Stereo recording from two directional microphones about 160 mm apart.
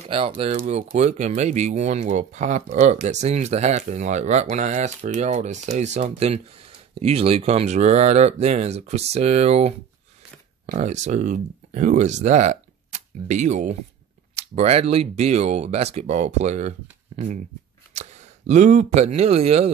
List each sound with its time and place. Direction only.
0.7 s speech: 45° right (ahead or behind)